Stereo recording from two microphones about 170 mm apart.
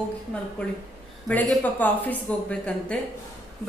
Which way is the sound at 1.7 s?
10° left (ahead or behind).